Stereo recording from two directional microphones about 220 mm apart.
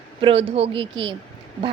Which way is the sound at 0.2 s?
25° right (ahead or behind).